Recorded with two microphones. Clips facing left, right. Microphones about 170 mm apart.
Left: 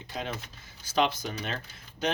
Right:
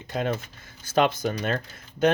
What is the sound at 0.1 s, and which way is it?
Speech, 55° right (ahead or behind).